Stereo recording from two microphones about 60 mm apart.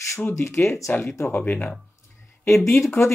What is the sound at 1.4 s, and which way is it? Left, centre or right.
Speech, left.